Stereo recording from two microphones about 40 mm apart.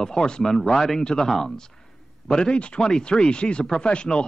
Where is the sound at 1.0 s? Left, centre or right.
Left.